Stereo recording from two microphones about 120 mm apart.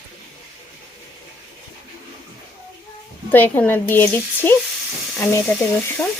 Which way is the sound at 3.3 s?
15° left (ahead or behind).